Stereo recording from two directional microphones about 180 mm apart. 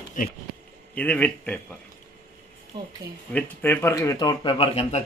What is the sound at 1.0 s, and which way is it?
Speech, 10° left (ahead or behind).